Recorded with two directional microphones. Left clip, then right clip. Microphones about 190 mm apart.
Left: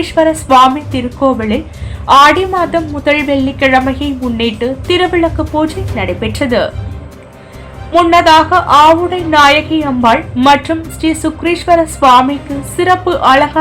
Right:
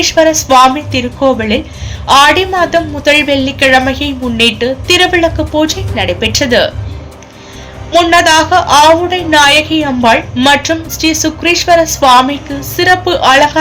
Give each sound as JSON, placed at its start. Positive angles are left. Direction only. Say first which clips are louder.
{"t": 0.0, "sound": "a woman's voice", "louder": "right 3 dB", "side_deg": -20}
{"t": 7.9, "sound": "a woman's voice", "louder": "even", "side_deg": -15}